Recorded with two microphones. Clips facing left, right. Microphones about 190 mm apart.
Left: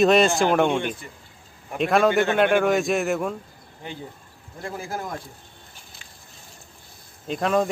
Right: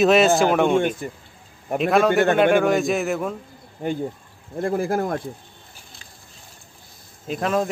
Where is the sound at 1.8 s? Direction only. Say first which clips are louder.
Right 2 dB; centre (ahead or behind).